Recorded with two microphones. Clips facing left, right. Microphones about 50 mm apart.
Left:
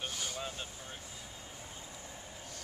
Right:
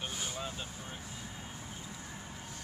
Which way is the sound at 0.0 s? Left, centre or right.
Centre.